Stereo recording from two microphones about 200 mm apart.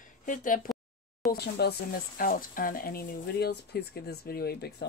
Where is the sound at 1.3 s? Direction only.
55° left (ahead or behind).